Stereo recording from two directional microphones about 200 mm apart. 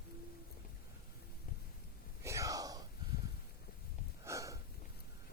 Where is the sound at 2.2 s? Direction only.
15° right (ahead or behind).